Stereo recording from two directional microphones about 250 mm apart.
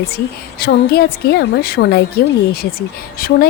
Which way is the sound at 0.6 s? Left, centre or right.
Left.